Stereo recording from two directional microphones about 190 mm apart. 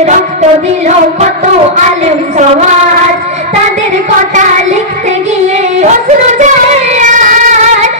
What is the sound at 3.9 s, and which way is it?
Child singing, 40° right (ahead or behind).